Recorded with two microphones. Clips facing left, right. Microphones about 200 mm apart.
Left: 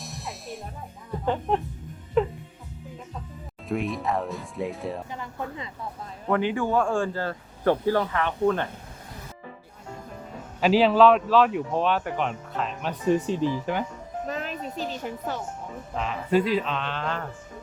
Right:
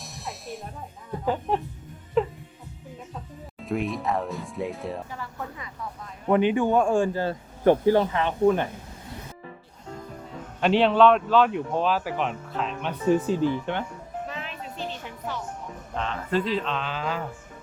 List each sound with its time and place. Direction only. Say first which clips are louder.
0.0 s music: even; centre (ahead or behind)
1.2 s speech: left 1 dB; 5° right (ahead or behind)
2.2 s music: left 1 dB; centre (ahead or behind)
3.6 s speech: even; centre (ahead or behind)
5.1 s speech: left 2 dB; 20° left (ahead or behind)
6.2 s speech: right 4 dB; 20° right (ahead or behind)
10.6 s speech: left 1 dB; 5° left (ahead or behind)
14.3 s music: left 5 dB; 40° left (ahead or behind)
16.0 s speech: left 3 dB; 10° left (ahead or behind)